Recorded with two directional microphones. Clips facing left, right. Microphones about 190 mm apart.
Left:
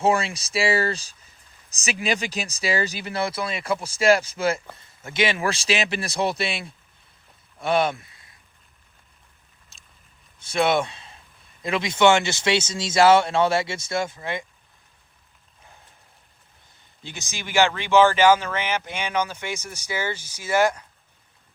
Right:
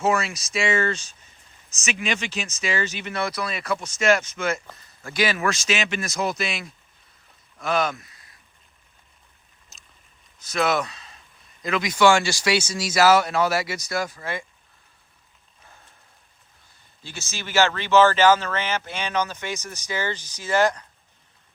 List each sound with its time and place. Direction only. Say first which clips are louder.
0.0 s speech: left 1 dB; 30° left (ahead or behind)
10.4 s speech: left 2 dB; 30° left (ahead or behind)
17.0 s speech: even; 15° left (ahead or behind)